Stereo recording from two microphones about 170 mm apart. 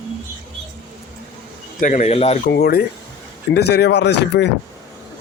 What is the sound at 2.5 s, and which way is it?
Speech, 70° left (ahead or behind).